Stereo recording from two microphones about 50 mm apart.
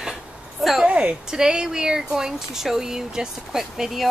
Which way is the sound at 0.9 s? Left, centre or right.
Right.